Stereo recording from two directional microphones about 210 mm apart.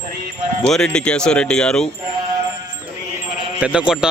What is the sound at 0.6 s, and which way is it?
Speech, 5° left (ahead or behind).